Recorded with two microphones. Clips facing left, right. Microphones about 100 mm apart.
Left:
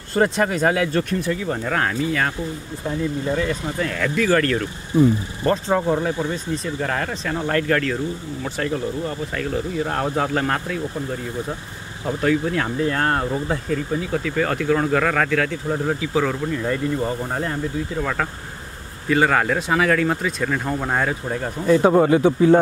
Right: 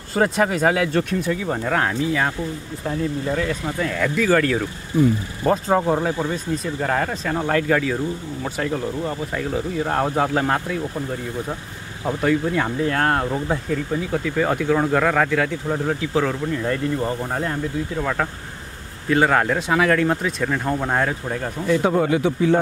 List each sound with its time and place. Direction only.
0.1 s speech: 5° right (ahead or behind)
3.3 s speech: 10° left (ahead or behind)
3.6 s speech: 5° right (ahead or behind)
4.9 s speech: 25° left (ahead or behind)
5.4 s speech: 5° right (ahead or behind)
5.8 s speech: 20° right (ahead or behind)
6.2 s speech: 10° right (ahead or behind)
9.0 s speech: 10° right (ahead or behind)
12.2 s speech: centre (ahead or behind)
21.6 s speech: 40° left (ahead or behind)